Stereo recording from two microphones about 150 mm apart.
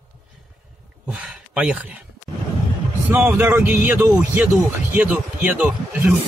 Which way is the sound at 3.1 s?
15° right (ahead or behind).